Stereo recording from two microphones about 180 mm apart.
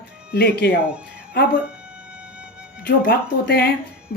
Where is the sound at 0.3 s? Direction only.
65° left (ahead or behind).